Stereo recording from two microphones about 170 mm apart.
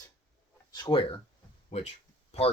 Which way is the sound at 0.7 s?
25° left (ahead or behind).